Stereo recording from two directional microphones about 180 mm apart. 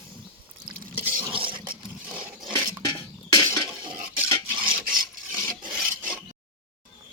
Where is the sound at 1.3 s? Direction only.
30° right (ahead or behind).